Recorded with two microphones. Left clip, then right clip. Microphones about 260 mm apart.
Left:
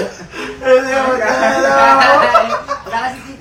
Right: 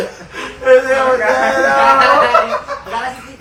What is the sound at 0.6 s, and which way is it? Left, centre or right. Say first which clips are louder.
Music: right 2 dB; left.